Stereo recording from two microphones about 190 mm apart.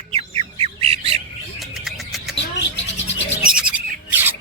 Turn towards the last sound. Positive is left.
turn(degrees=-10)  # may be behind; listen again after turning